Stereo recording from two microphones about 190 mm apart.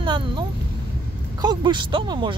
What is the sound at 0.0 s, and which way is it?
Speech, 25° right (ahead or behind).